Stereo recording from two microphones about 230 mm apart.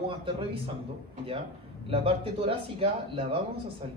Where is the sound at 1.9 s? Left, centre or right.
Right.